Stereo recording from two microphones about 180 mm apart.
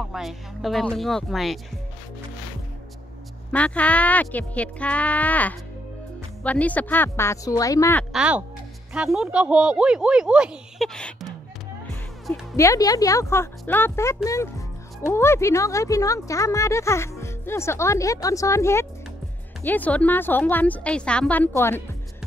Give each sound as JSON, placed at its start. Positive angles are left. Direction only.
{"t": 0.0, "sound": "speech", "side_deg": 0}
{"t": 3.5, "sound": "speech", "side_deg": 5}
{"t": 8.1, "sound": "speech", "side_deg": -5}
{"t": 12.5, "sound": "speech", "side_deg": 20}